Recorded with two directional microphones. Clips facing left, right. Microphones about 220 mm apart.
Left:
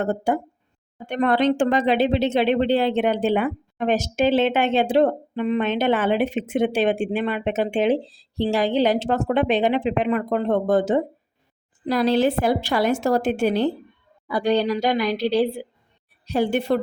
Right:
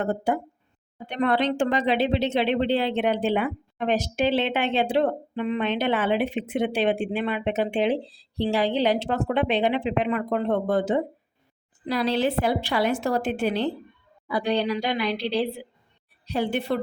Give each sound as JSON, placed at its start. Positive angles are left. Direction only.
{"t": 0.0, "sound": "speech", "side_deg": 45}